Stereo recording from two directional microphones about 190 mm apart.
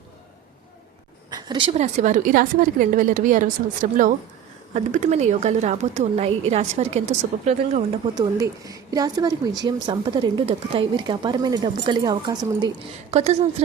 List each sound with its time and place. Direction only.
1.3 s a woman's voice: 25° right (ahead or behind); by 3.5 s 45° right (ahead or behind)
4.7 s speech: 40° right (ahead or behind)
8.1 s a woman's voice: 20° right (ahead or behind)
13.1 s speech: 35° right (ahead or behind)